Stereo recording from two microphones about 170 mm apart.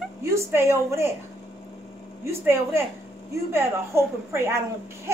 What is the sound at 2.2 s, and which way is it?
A woman's voice, 15° right (ahead or behind).